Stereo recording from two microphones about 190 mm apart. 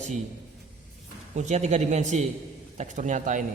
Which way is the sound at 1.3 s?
40° right (ahead or behind).